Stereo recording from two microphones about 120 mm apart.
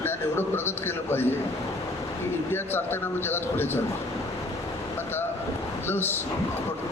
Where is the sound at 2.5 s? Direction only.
20° left (ahead or behind).